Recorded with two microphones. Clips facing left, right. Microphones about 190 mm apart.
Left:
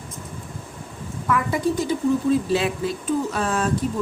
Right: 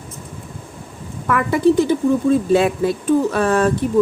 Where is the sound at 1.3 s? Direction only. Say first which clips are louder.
Right 7 dB; 65° right (ahead or behind).